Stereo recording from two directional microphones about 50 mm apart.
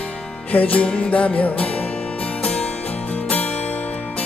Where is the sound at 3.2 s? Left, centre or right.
Left.